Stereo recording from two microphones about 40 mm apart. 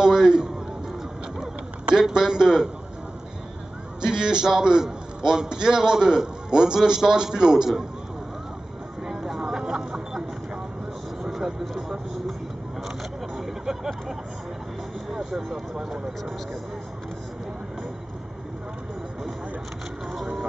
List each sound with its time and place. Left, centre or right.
0.0 s a sound: centre
4.0 s a man's voice: centre
9.0 s vehicle: centre
13.4 s vehicle: centre
15.1 s a man's voice: centre